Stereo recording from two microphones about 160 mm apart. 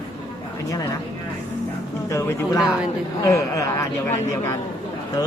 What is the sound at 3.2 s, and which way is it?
Speech, 20° left (ahead or behind).